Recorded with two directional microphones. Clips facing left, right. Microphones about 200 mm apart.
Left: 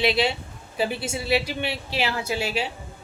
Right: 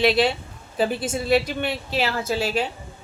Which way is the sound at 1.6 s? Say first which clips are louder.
Right 2 dB; 50° right (ahead or behind).